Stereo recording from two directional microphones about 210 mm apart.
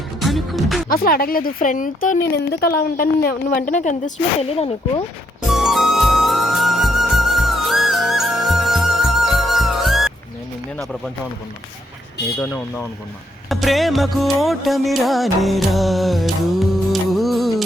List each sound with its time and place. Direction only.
0.2 s music: centre (ahead or behind)
0.9 s speech: 45° left (ahead or behind); by 5.0 s 30° left (ahead or behind)
5.5 s music: centre (ahead or behind)
12.4 s speech: 10° left (ahead or behind)
13.5 s music: centre (ahead or behind)